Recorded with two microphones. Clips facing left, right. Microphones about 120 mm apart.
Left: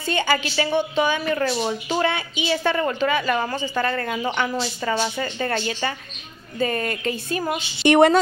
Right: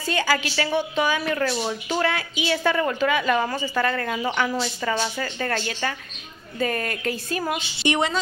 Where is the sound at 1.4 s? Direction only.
10° left (ahead or behind).